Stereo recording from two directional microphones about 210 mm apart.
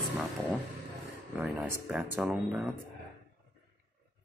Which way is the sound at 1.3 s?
5° right (ahead or behind).